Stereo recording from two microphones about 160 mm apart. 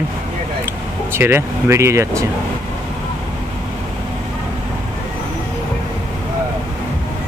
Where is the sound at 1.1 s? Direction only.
15° right (ahead or behind).